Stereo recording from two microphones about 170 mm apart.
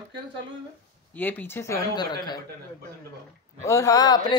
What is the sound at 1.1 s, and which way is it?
Speech, 10° left (ahead or behind).